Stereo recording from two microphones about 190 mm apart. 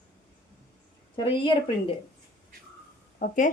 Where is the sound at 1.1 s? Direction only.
25° left (ahead or behind).